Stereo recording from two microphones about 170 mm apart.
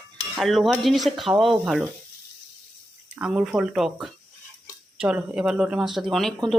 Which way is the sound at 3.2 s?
5° right (ahead or behind).